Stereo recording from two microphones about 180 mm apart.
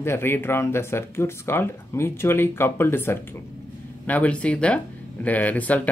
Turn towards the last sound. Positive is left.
turn(degrees=10)  # may be behind; listen again after turning